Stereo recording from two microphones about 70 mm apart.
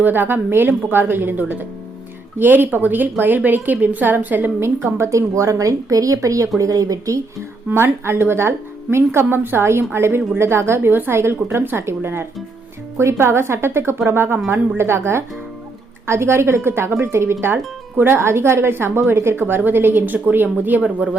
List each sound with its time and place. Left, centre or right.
0.0 s a woman's voice: right
7.7 s a woman's voice: right; by 21.2 s centre